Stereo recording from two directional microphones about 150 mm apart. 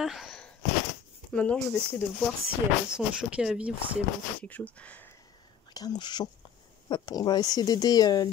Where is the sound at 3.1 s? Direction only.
5° right (ahead or behind).